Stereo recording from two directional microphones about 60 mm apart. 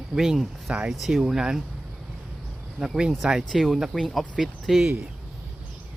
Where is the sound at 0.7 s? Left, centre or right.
Centre.